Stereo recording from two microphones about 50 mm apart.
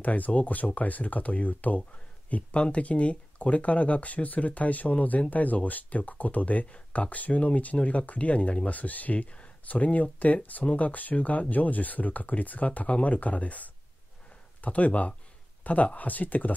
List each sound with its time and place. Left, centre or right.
0.0 s speech: left